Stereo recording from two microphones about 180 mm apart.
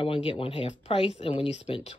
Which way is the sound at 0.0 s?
30° left (ahead or behind).